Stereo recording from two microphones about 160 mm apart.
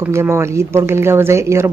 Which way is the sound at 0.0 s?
15° right (ahead or behind).